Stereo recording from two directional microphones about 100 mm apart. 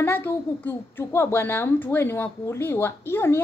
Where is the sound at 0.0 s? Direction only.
20° left (ahead or behind).